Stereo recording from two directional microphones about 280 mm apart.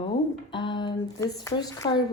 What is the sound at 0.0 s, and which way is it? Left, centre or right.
Speech, centre.